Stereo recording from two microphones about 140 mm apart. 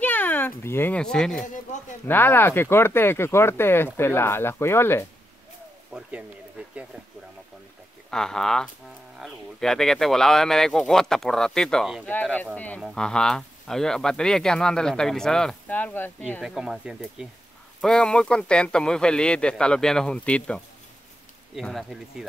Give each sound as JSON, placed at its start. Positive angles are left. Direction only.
{"t": 0.0, "sound": "speech", "side_deg": 15}
{"t": 2.0, "sound": "speech", "side_deg": 15}
{"t": 5.9, "sound": "speech", "side_deg": -5}
{"t": 8.1, "sound": "speech", "side_deg": 5}
{"t": 16.4, "sound": "speech", "side_deg": -5}
{"t": 17.7, "sound": "speech", "side_deg": 5}